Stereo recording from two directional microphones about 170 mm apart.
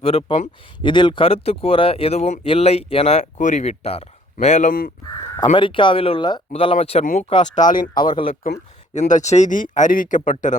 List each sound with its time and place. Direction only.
0.0 s speech: 35° left (ahead or behind)
0.8 s speech: 30° left (ahead or behind); by 4.9 s 50° left (ahead or behind)
5.5 s speech: 30° left (ahead or behind)
7.0 s speech: 50° left (ahead or behind)
7.9 s speech: 30° left (ahead or behind)
8.9 s speech: 45° left (ahead or behind)